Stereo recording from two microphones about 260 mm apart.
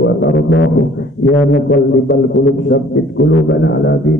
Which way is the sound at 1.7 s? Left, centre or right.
Left.